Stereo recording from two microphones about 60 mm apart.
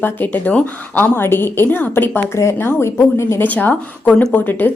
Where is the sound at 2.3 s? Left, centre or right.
Left.